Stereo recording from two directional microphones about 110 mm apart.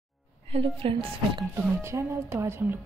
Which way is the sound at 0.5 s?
60° right (ahead or behind).